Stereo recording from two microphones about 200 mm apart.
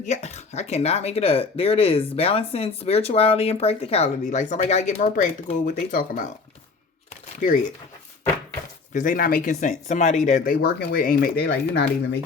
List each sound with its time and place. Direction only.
0.0 s speech: 35° left (ahead or behind)
8.9 s speech: 40° left (ahead or behind)